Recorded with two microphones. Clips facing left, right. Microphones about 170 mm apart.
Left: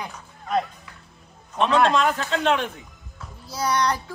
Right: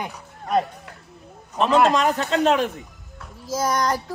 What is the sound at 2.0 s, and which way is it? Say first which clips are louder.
A woman's voice: right 2 dB; 40° right (ahead or behind).